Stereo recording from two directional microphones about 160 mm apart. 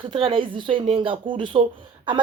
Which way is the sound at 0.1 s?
35° right (ahead or behind).